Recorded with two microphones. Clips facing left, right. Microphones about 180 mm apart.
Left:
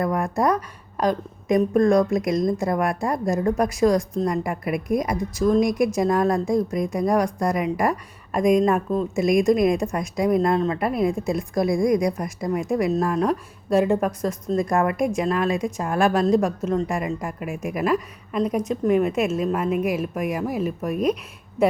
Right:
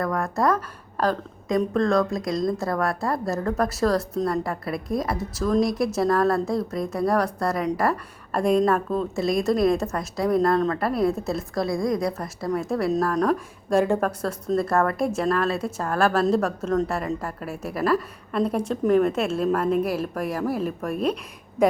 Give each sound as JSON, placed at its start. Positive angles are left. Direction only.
{"t": 0.0, "sound": "a woman's voice", "side_deg": 20}